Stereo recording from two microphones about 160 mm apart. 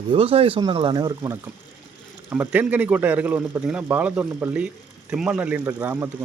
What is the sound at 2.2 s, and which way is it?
A man's voice, 10° right (ahead or behind).